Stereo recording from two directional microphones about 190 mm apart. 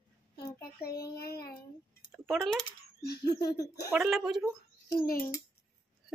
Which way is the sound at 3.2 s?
20° left (ahead or behind).